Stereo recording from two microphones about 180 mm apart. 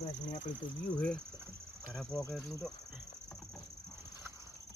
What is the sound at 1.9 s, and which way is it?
Speech, 5° left (ahead or behind).